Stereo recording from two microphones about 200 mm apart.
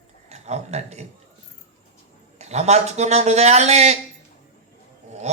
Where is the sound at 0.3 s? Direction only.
35° right (ahead or behind).